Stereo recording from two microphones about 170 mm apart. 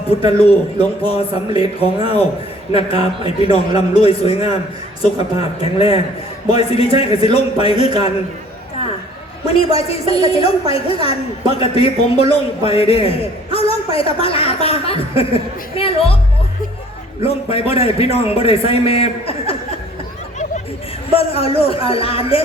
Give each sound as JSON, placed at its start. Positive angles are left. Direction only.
{"t": 0.2, "sound": "a man's voice", "side_deg": 35}
{"t": 9.5, "sound": "a man's voice", "side_deg": 35}
{"t": 17.2, "sound": "a man's voice", "side_deg": 35}
{"t": 21.2, "sound": "a man's voice", "side_deg": 35}